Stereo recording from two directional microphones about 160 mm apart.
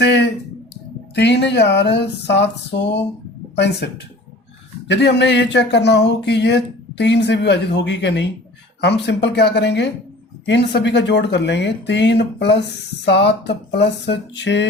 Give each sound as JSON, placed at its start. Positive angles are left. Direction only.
{"t": 0.0, "sound": "a sound", "side_deg": 90}
{"t": 1.1, "sound": "speech", "side_deg": 90}
{"t": 4.9, "sound": "speech", "side_deg": 90}